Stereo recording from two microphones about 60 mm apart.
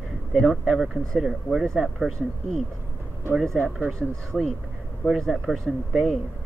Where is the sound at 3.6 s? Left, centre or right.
Centre.